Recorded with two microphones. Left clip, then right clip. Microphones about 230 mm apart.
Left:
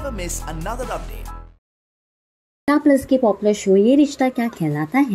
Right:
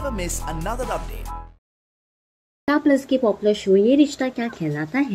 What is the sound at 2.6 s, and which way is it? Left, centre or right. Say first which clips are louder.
Speech: left 3 dB; centre.